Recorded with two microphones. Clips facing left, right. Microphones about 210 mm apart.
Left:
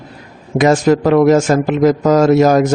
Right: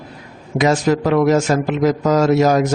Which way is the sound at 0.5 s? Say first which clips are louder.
Left 4 dB; 50° left (ahead or behind).